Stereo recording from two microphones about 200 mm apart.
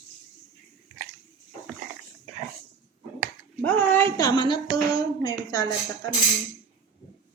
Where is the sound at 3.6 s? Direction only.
10° left (ahead or behind).